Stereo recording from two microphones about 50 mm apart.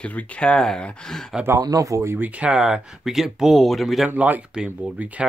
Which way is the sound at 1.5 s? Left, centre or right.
Right.